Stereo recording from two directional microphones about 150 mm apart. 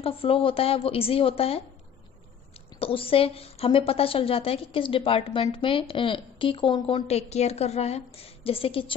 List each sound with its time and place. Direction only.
0.0 s a woman's voice: 40° left (ahead or behind)
2.8 s a woman's voice: 40° left (ahead or behind)